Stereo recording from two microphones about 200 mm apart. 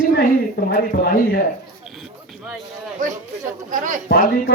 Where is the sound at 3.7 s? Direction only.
40° right (ahead or behind).